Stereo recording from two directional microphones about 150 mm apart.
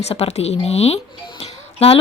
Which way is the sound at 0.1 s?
45° left (ahead or behind).